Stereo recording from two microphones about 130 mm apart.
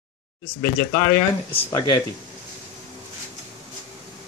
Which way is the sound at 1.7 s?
30° left (ahead or behind).